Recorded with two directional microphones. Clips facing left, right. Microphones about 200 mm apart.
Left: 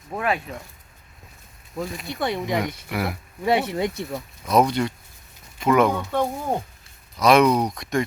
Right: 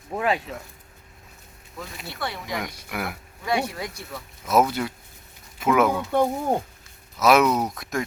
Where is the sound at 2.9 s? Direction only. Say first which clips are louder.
Left 3 dB; centre (ahead or behind).